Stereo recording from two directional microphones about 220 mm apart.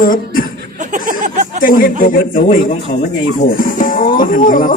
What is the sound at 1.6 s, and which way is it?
Speech, 40° left (ahead or behind).